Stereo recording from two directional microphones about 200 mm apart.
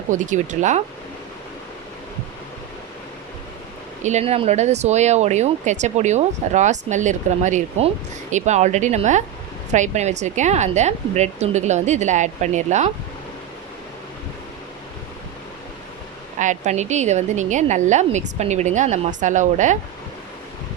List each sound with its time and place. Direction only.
0.1 s speech: 40° right (ahead or behind)
4.0 s speech: 35° right (ahead or behind)
16.4 s speech: 35° right (ahead or behind)